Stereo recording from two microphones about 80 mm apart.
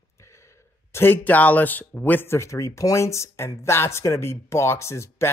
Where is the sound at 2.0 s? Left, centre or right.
Left.